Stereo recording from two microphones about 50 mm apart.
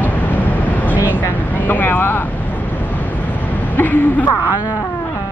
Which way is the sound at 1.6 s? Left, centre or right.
Left.